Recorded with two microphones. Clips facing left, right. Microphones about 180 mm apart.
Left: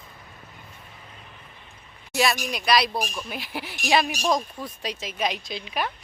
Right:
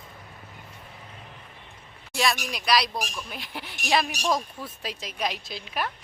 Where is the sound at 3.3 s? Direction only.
5° left (ahead or behind).